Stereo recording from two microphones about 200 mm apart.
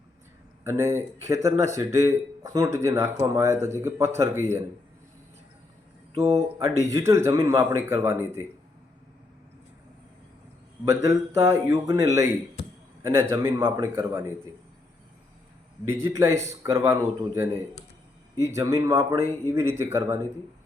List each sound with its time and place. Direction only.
0.6 s speech: 15° right (ahead or behind)
6.2 s speech: 15° right (ahead or behind)
10.8 s speech: 15° right (ahead or behind)
15.9 s speech: 15° right (ahead or behind)